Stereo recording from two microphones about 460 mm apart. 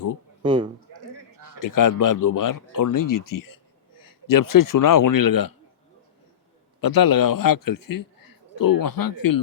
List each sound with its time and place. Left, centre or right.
0.4 s a man's voice: centre
1.5 s a man's voice: left
6.8 s a man's voice: left